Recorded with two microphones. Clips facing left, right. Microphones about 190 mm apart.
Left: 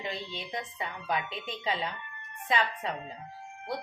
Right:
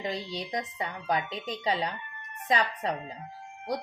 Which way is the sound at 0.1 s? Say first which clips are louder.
Right 4 dB; 40° right (ahead or behind).